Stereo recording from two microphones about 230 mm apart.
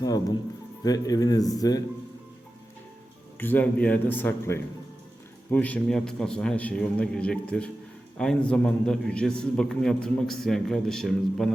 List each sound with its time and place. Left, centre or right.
0.0 s a man's voice: centre
3.3 s a man's voice: centre